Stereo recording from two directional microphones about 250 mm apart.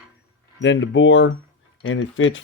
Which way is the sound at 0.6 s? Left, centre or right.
Left.